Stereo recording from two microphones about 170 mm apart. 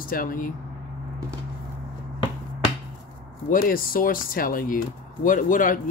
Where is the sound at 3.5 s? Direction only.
55° left (ahead or behind).